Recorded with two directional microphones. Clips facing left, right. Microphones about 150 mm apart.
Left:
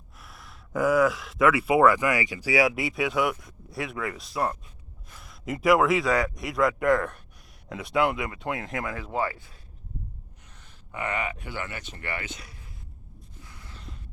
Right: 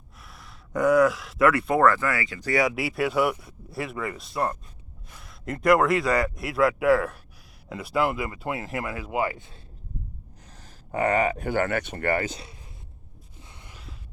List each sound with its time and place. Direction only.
0.2 s speech: centre (ahead or behind)
2.5 s speech: centre (ahead or behind); by 9.6 s 20° right (ahead or behind)
10.5 s speech: 40° right (ahead or behind)
13.4 s gasp: 20° right (ahead or behind)